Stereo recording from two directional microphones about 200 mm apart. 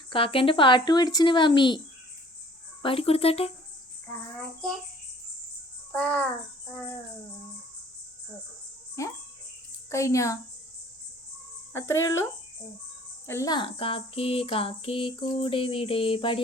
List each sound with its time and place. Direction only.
0.1 s speech: 25° left (ahead or behind)
2.8 s speech: 30° left (ahead or behind)
5.9 s speech: 5° left (ahead or behind)
9.0 s speech: 15° left (ahead or behind)
11.7 s speech: 15° left (ahead or behind)
13.2 s speech: 15° left (ahead or behind)